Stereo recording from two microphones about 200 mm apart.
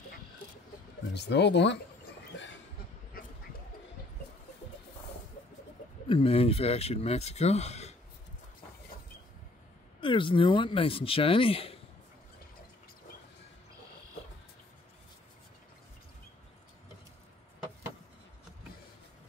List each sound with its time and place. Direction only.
1.1 s speech: 60° left (ahead or behind)
3.1 s a sound: 45° left (ahead or behind)
6.0 s speech: 30° left (ahead or behind)
9.9 s speech: 25° left (ahead or behind)